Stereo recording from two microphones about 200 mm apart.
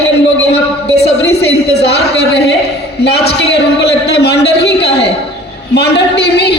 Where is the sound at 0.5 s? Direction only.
55° left (ahead or behind).